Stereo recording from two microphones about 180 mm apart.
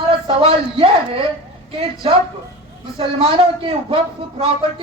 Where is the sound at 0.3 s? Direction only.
30° right (ahead or behind).